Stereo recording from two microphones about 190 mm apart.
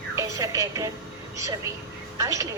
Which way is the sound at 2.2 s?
15° right (ahead or behind).